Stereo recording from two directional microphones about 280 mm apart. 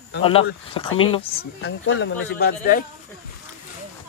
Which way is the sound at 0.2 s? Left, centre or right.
Centre.